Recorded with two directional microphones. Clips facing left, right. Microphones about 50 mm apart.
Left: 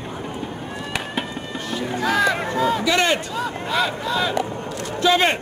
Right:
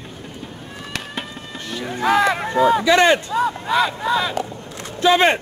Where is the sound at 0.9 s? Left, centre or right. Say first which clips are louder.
Left 2 dB; centre.